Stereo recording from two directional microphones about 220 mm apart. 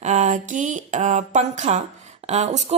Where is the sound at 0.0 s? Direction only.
30° right (ahead or behind).